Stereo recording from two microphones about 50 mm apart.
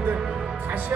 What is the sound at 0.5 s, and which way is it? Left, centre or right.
Speech, right.